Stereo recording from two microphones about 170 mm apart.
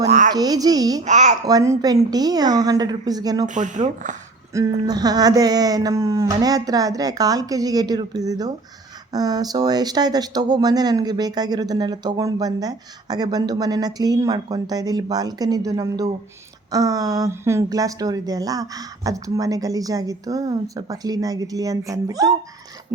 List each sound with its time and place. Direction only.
0.3 s speech: 20° right (ahead or behind)
1.0 s speech: 45° right (ahead or behind)
1.5 s speech: 20° right (ahead or behind)
3.4 s speech: 45° right (ahead or behind)
4.5 s speech: 20° right (ahead or behind)